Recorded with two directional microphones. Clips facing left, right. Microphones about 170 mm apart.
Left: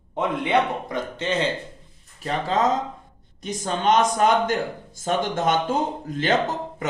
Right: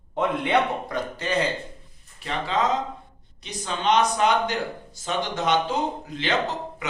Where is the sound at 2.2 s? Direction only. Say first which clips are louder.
Left 3 dB; 45° left (ahead or behind).